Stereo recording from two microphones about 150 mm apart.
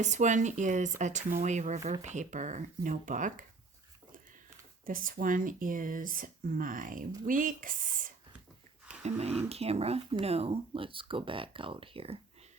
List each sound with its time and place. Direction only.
0.0 s speech: 55° right (ahead or behind)
4.9 s speech: 65° right (ahead or behind)
8.9 s a sound: 45° right (ahead or behind)
9.5 s speech: 45° right (ahead or behind)